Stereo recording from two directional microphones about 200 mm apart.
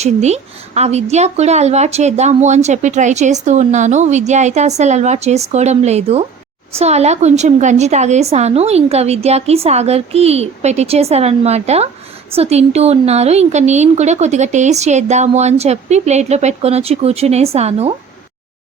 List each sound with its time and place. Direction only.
0.0 s a woman's voice: 35° right (ahead or behind)